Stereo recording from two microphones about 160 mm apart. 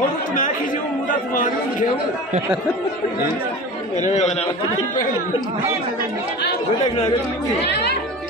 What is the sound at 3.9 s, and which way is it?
Speech, 45° left (ahead or behind).